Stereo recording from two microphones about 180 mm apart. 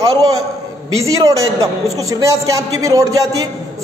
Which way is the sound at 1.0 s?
20° right (ahead or behind).